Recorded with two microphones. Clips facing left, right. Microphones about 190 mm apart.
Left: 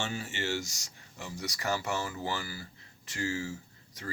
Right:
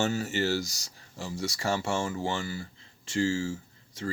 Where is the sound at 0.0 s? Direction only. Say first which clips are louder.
Right 7 dB; 40° right (ahead or behind).